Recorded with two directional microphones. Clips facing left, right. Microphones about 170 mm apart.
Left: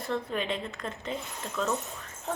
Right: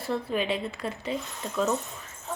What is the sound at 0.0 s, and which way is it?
Speech, 5° right (ahead or behind).